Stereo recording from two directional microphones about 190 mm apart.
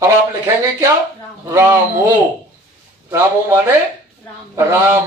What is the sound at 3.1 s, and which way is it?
Speech, 15° right (ahead or behind).